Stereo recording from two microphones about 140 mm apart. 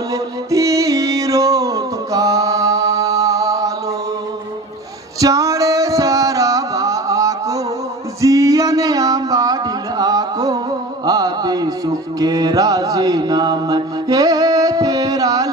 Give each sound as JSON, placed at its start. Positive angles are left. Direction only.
{"t": 0.1, "sound": "music", "side_deg": -25}
{"t": 5.2, "sound": "music", "side_deg": -25}
{"t": 8.2, "sound": "carnatic music", "side_deg": -25}
{"t": 11.1, "sound": "music", "side_deg": -30}